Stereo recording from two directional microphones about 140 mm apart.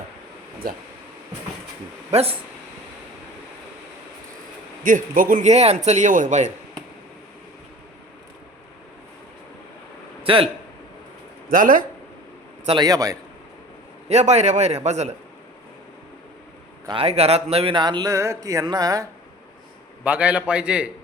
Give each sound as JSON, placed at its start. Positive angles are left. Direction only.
{"t": 2.0, "sound": "a man's voice", "side_deg": -45}
{"t": 4.8, "sound": "a man's voice", "side_deg": -75}
{"t": 10.2, "sound": "speech", "side_deg": -40}
{"t": 11.5, "sound": "speech", "side_deg": -80}
{"t": 12.8, "sound": "a man's voice", "side_deg": -25}
{"t": 14.1, "sound": "a man's voice", "side_deg": -50}
{"t": 16.9, "sound": "speech", "side_deg": -45}
{"t": 20.1, "sound": "a man's voice", "side_deg": -10}